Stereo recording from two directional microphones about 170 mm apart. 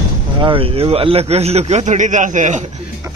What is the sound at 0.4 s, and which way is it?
A man's voice, 30° right (ahead or behind).